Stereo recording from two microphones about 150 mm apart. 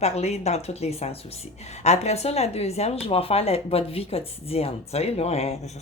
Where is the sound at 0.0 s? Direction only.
45° left (ahead or behind).